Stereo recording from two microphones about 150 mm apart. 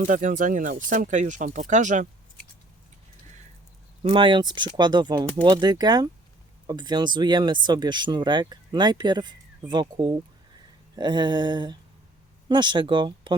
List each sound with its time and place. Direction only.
0.0 s speech: 60° right (ahead or behind)
4.0 s speech: 35° right (ahead or behind)